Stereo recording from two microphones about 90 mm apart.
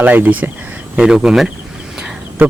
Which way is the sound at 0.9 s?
5° right (ahead or behind).